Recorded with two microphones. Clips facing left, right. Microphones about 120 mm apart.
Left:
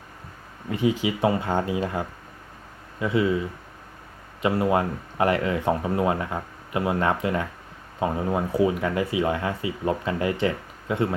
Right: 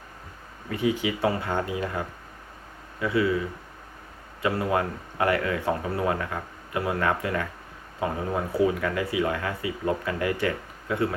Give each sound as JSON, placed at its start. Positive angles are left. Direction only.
{"t": 0.7, "sound": "speech", "side_deg": 20}
{"t": 4.4, "sound": "speech", "side_deg": 25}